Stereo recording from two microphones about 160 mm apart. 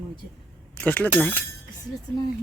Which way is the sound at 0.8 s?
10° left (ahead or behind).